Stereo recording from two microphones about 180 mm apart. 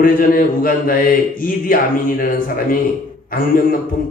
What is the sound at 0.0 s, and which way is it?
Mantra, 50° left (ahead or behind).